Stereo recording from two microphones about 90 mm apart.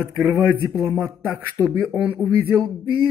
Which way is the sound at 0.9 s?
20° right (ahead or behind).